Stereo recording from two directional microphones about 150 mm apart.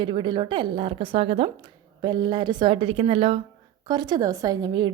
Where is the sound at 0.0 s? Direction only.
35° right (ahead or behind).